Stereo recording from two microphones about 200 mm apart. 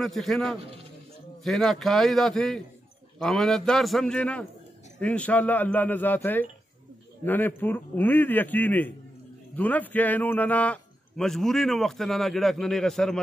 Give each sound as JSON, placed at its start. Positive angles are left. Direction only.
{"t": 0.0, "sound": "a man's voice", "side_deg": 0}